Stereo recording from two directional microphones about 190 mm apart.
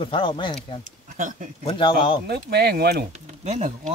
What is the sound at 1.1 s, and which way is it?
Speech, 45° right (ahead or behind).